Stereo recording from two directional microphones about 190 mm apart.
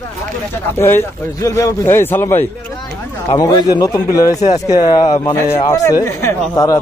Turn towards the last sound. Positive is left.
turn(degrees=15)  # may be behind; listen again after turning